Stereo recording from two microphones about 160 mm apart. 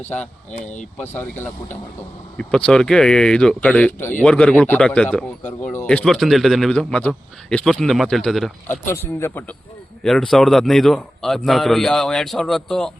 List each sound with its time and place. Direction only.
0.5 s speech: 50° left (ahead or behind)
0.9 s speech: 10° left (ahead or behind)
9.1 s speech: 15° left (ahead or behind)
10.0 s speech: centre (ahead or behind)